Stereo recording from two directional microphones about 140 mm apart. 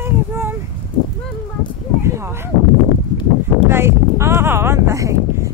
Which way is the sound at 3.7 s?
15° right (ahead or behind).